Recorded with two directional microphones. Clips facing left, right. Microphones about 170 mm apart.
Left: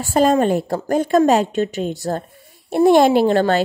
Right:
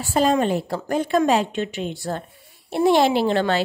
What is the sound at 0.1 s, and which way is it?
A woman's voice, 45° left (ahead or behind).